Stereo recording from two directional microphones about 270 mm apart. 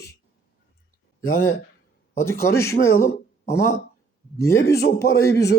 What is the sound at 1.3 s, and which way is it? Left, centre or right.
Speech, left.